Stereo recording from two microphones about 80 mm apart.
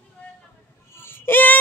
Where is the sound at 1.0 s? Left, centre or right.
Left.